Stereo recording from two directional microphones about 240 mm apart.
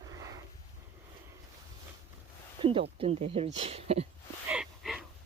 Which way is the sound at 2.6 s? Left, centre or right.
Right.